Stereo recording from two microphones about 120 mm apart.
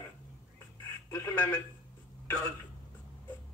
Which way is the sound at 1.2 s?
20° left (ahead or behind).